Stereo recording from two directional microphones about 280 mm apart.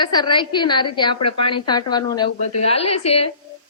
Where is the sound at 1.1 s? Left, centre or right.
Left.